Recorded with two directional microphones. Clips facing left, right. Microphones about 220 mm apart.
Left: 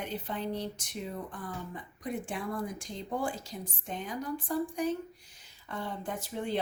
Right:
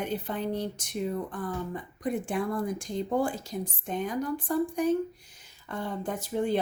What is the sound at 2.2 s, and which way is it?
Speech, 45° right (ahead or behind).